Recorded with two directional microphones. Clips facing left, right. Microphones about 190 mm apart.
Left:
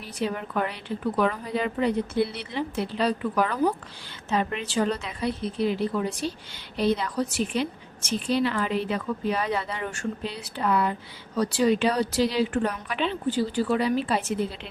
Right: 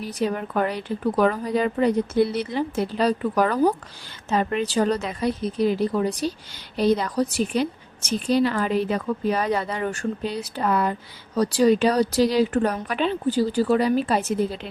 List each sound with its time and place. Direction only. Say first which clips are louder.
0.0 s a woman's voice: right 4 dB; 40° right (ahead or behind)